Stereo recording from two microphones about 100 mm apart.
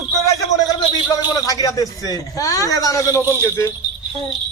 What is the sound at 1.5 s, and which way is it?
A man's voice, 35° left (ahead or behind).